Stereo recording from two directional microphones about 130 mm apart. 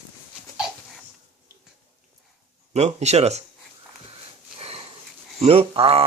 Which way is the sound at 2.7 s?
60° right (ahead or behind).